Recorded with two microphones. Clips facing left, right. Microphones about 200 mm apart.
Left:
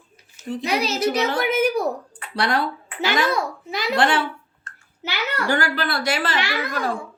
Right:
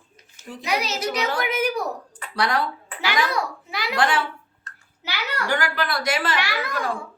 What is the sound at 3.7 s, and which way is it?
A child's voice, 25° left (ahead or behind).